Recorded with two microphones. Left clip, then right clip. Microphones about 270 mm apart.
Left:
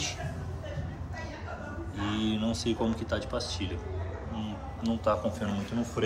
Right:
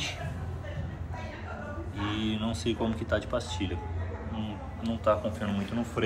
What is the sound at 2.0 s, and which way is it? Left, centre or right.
Speech, centre.